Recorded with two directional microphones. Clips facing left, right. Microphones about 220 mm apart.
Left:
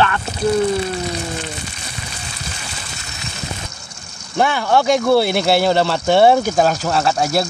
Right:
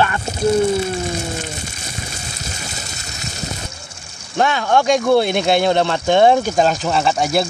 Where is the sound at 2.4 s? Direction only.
40° right (ahead or behind).